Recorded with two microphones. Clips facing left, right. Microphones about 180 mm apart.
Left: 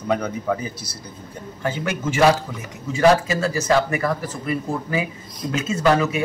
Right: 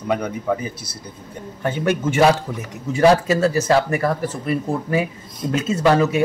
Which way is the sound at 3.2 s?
40° right (ahead or behind).